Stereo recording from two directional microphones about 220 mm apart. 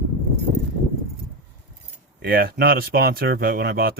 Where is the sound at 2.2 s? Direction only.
45° right (ahead or behind).